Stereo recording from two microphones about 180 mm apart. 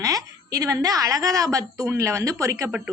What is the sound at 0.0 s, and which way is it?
A woman's voice, 20° right (ahead or behind).